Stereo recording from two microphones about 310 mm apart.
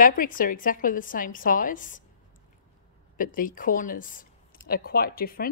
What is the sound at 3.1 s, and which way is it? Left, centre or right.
Speech, left.